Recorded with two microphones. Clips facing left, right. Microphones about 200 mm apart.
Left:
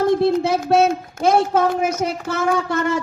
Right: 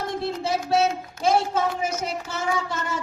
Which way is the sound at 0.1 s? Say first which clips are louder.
Left 10 dB; 60° left (ahead or behind).